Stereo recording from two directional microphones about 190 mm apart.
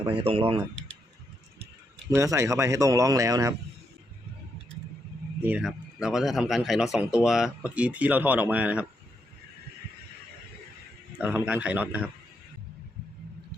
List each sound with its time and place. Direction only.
0.1 s speech: 25° right (ahead or behind)
2.0 s speech: 15° right (ahead or behind)
5.4 s speech: 5° right (ahead or behind)
11.2 s speech: 10° right (ahead or behind)